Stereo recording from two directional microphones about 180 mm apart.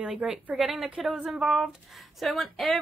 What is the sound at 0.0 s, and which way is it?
A woman's voice, 5° right (ahead or behind).